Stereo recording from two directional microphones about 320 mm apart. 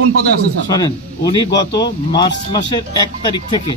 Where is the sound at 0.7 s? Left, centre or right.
Centre.